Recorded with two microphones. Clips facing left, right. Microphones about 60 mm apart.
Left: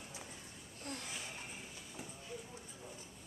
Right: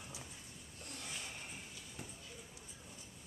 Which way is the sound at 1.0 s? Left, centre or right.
Centre.